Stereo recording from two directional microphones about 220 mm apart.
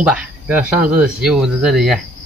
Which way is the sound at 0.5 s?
40° right (ahead or behind).